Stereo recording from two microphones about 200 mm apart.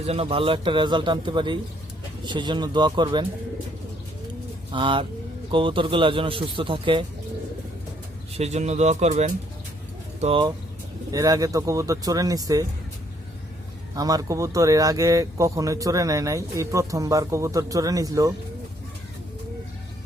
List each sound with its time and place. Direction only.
0.0 s a man's voice: 30° right (ahead or behind)
4.7 s a man's voice: 25° right (ahead or behind)
8.4 s speech: 35° right (ahead or behind)
11.1 s speech: 15° right (ahead or behind)
13.9 s speech: 20° right (ahead or behind)